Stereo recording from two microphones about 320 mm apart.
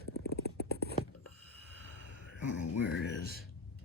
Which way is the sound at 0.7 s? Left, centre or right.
Right.